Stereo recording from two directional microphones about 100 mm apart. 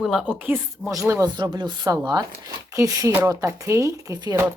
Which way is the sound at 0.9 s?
30° right (ahead or behind).